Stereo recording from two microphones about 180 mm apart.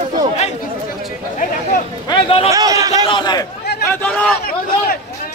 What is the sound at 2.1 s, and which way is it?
Speech, 30° left (ahead or behind).